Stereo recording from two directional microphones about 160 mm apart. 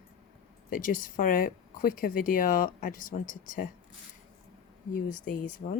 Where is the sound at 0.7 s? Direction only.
60° left (ahead or behind).